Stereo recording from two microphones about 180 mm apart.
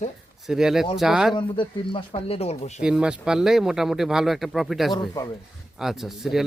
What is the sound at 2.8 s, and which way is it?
Speech, 5° right (ahead or behind).